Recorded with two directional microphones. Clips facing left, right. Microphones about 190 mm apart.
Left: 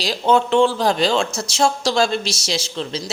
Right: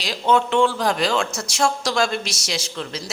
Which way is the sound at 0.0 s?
35° left (ahead or behind).